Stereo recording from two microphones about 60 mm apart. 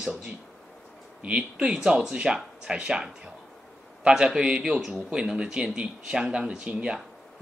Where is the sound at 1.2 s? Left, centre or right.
Centre.